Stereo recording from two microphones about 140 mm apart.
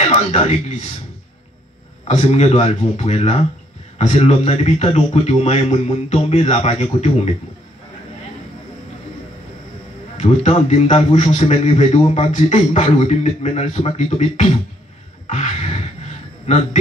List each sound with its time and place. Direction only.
0.0 s speech: 50° left (ahead or behind)
2.0 s a man's voice: 50° left (ahead or behind)
10.1 s a man's voice: 55° left (ahead or behind)